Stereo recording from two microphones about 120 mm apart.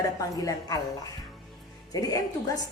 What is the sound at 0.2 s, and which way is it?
Speech, 30° left (ahead or behind).